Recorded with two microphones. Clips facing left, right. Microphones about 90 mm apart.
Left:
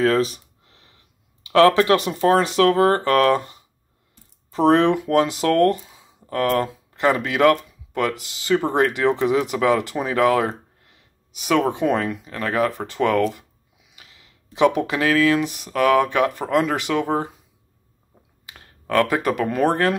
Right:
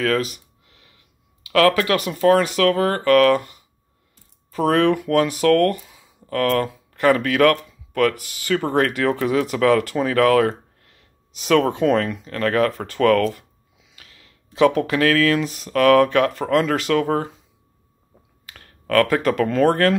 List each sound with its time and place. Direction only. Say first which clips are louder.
0.0 s speech: left 3 dB; 30° left (ahead or behind); by 17.3 s 15° left (ahead or behind)
18.4 s speech: even; 20° left (ahead or behind)